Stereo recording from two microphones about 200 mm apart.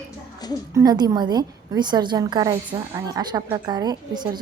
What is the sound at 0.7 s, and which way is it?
A woman's voice, 20° right (ahead or behind).